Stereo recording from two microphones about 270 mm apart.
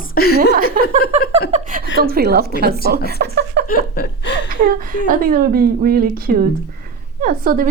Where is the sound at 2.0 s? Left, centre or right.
Right.